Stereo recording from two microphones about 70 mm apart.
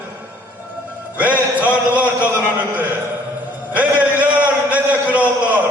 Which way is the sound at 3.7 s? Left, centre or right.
Right.